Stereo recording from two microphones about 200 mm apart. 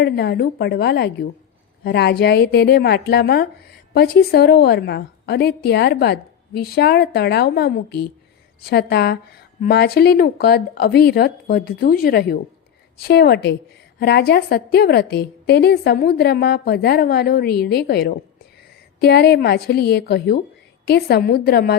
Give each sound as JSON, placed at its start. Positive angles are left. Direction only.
{"t": 0.0, "sound": "a woman's voice", "side_deg": 55}